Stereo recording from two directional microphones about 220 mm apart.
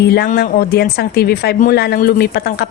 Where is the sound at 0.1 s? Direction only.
45° left (ahead or behind).